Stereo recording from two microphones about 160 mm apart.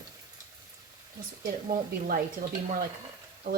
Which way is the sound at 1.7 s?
60° right (ahead or behind).